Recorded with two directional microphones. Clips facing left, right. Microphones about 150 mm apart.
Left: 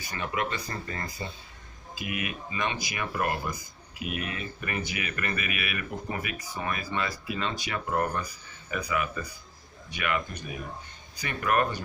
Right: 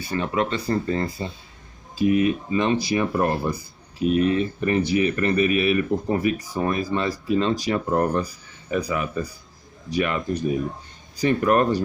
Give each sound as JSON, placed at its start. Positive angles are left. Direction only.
{"t": 0.0, "sound": "speech", "side_deg": -30}